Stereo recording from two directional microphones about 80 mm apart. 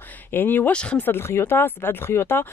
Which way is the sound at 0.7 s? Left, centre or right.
Centre.